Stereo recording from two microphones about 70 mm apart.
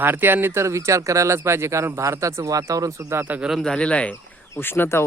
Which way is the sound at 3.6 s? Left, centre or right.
Centre.